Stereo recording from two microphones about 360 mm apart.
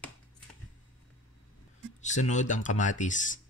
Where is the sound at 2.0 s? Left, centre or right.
Centre.